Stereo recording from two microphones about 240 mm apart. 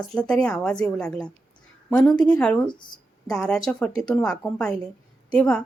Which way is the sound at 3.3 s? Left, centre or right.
Centre.